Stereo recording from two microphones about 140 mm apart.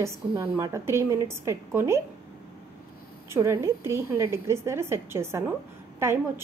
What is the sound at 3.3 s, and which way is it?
A woman's voice, 20° right (ahead or behind).